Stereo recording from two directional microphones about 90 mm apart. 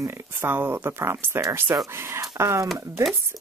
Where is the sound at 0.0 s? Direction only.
25° right (ahead or behind).